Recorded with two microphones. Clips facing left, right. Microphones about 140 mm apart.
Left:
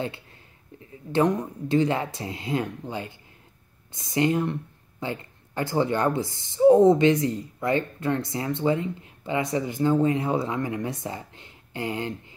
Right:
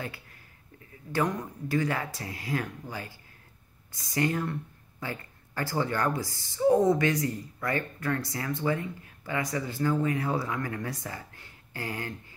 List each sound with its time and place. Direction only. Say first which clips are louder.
1.1 s speech: left 6 dB; 25° left (ahead or behind)